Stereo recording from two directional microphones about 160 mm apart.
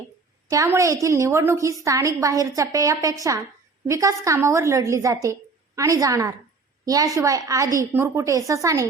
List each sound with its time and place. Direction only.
0.5 s a woman's voice: 20° right (ahead or behind)